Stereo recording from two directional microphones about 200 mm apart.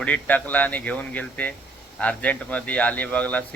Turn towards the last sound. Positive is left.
turn(degrees=5)  # may be behind; listen again after turning